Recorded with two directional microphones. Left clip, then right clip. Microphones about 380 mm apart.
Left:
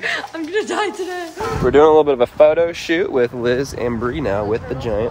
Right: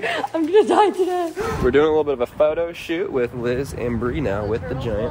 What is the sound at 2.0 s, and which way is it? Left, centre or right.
Speech, left.